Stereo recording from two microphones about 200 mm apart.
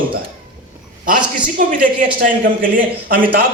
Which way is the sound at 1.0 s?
45° right (ahead or behind).